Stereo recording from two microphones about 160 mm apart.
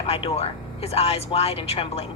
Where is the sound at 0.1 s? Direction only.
40° left (ahead or behind).